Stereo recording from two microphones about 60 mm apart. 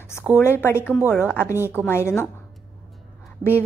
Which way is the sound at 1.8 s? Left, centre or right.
Left.